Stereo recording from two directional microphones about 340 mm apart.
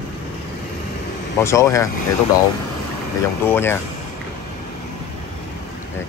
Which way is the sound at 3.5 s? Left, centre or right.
Centre.